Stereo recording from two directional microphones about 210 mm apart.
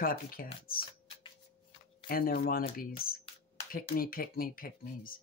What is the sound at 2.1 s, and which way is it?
Speech, 45° left (ahead or behind).